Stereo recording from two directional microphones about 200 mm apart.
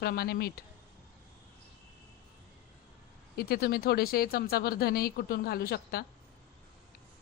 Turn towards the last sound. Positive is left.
turn(degrees=50)  # may be behind; listen again after turning